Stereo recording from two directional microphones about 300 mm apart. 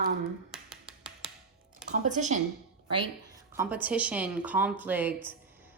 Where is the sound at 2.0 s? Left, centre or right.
Right.